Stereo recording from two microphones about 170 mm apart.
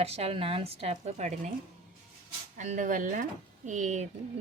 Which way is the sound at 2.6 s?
45° right (ahead or behind).